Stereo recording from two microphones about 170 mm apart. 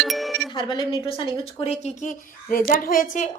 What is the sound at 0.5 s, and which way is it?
A woman's voice, 30° left (ahead or behind).